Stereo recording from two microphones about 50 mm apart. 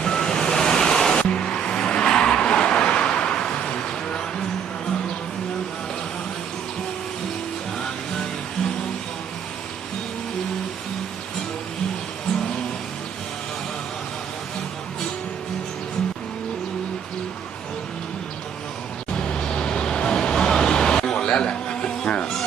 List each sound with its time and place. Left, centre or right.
0.0 s waves: centre
1.2 s vehicle: centre
19.1 s vehicle: centre